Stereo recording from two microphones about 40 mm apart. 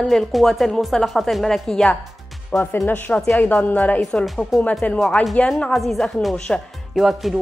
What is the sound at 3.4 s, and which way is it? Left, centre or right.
Speech, left.